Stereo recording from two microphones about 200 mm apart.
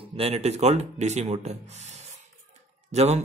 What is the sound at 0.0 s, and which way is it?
Speech, 30° right (ahead or behind).